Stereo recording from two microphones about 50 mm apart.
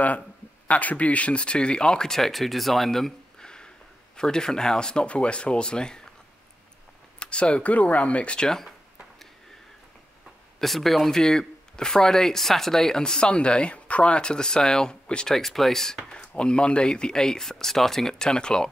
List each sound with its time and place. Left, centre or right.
0.7 s speech: left
7.2 s speech: left
10.6 s speech: centre
15.3 s speech: centre